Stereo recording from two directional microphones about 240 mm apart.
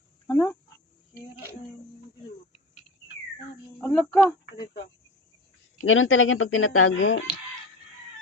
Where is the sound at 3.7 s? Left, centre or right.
Centre.